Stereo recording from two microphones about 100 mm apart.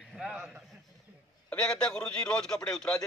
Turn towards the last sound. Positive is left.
turn(degrees=5)  # may be behind; listen again after turning